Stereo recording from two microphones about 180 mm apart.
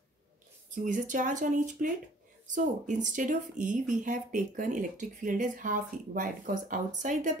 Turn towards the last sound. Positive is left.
turn(degrees=-45)  # may be behind; listen again after turning